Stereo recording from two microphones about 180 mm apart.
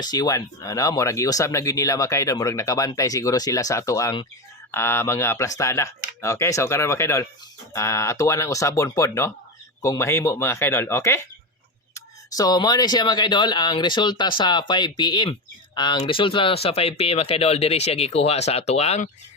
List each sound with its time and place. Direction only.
0.0 s speech: 20° left (ahead or behind)